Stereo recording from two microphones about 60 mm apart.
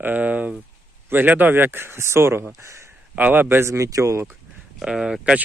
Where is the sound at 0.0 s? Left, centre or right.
Right.